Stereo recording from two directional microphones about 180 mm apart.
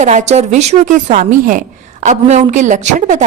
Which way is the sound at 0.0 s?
40° right (ahead or behind).